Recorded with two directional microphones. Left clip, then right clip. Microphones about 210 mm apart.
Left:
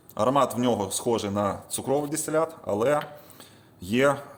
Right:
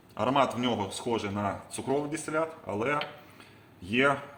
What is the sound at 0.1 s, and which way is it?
Speech, 65° left (ahead or behind).